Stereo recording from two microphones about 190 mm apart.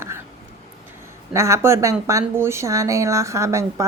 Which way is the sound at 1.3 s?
15° right (ahead or behind).